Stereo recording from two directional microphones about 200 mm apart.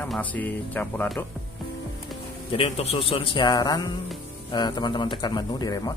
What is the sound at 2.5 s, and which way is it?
A man's voice, 30° left (ahead or behind).